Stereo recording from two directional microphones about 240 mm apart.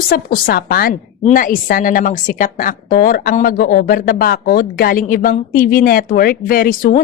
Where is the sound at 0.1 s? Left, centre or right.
Left.